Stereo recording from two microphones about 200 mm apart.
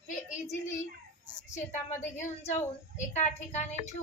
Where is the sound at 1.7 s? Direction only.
35° left (ahead or behind).